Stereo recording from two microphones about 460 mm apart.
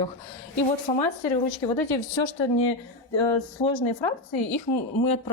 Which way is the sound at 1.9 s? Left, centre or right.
Left.